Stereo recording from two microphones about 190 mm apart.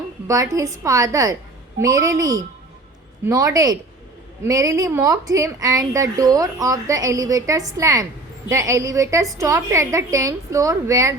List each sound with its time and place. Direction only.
0.3 s a woman's voice: 15° right (ahead or behind)